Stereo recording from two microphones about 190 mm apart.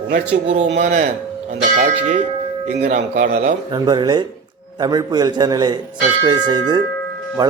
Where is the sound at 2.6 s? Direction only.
35° right (ahead or behind).